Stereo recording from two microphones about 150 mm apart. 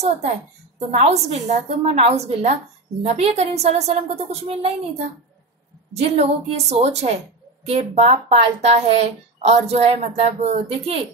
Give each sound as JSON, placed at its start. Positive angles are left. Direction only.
{"t": 0.7, "sound": "speech", "side_deg": -45}